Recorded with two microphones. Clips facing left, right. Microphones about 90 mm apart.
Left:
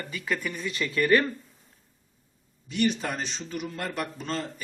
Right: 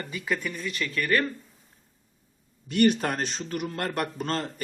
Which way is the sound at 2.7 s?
55° right (ahead or behind).